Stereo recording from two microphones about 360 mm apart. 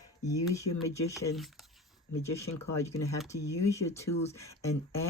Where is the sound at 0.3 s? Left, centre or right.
Centre.